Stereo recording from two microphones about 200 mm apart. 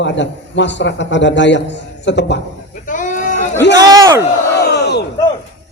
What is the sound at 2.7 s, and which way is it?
Sheep, 40° left (ahead or behind).